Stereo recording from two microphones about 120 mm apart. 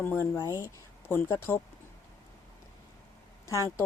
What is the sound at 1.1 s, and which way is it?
Speech, 20° left (ahead or behind).